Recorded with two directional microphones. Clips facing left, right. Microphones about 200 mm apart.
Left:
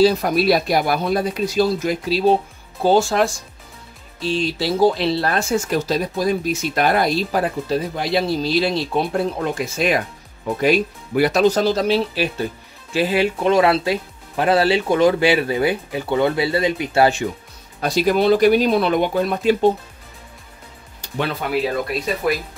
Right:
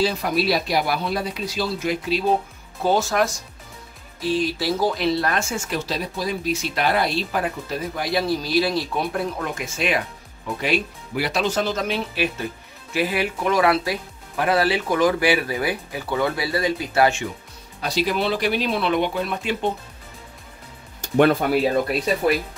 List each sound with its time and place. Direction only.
0.0 s speech: 45° left (ahead or behind); by 9.7 s 25° left (ahead or behind)
9.8 s speech: 40° left (ahead or behind)
17.8 s speech: 45° left (ahead or behind)
21.0 s speech: 45° right (ahead or behind)